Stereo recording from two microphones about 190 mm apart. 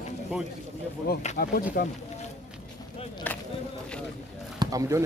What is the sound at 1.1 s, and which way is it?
Speech, 55° left (ahead or behind).